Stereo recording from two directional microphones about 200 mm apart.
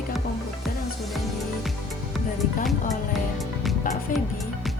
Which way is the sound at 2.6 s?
Centre (ahead or behind).